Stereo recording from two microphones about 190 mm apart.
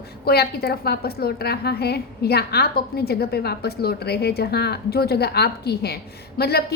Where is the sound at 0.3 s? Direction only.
55° left (ahead or behind).